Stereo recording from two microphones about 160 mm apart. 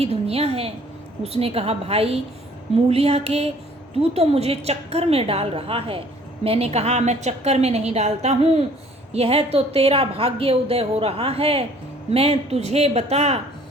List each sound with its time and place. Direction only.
0.0 s a woman's voice: 40° right (ahead or behind)